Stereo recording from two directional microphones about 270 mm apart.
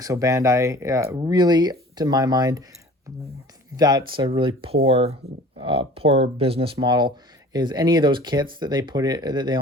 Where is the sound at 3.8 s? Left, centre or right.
Centre.